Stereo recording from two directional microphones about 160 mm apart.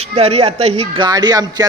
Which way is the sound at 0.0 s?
40° right (ahead or behind).